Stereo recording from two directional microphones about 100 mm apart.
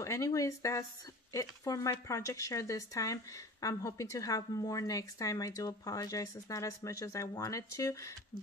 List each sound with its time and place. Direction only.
0.0 s a woman's voice: 30° left (ahead or behind)